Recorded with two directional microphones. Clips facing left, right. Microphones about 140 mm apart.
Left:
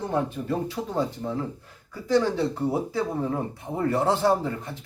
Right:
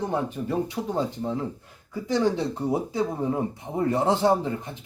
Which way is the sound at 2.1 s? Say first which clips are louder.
Left 1 dB; 20° right (ahead or behind).